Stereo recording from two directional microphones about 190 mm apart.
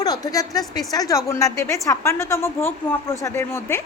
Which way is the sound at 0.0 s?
20° left (ahead or behind).